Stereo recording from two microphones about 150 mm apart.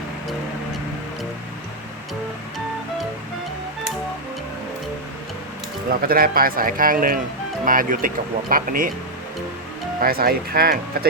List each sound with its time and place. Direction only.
5.9 s a man's voice: 80° right
10.0 s speech: 80° right